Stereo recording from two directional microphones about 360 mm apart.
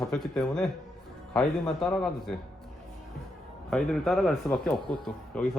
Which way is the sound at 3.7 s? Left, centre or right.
Centre.